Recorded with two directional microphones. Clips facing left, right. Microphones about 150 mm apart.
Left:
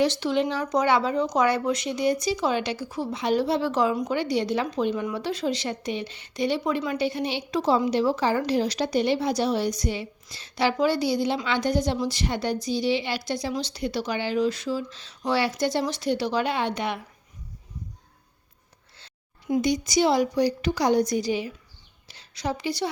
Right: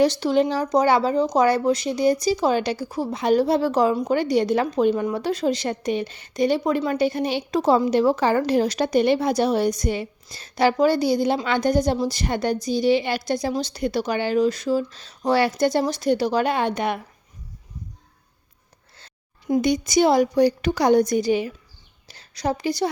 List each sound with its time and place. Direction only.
0.0 s speech: 40° right (ahead or behind)
4.1 s speech: 45° right (ahead or behind)
18.9 s a sound: 45° right (ahead or behind)
19.6 s a woman's voice: 55° right (ahead or behind)
22.0 s a woman's voice: 45° right (ahead or behind)